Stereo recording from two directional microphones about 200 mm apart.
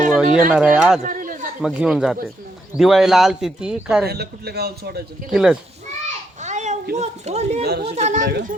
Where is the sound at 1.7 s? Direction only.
5° right (ahead or behind).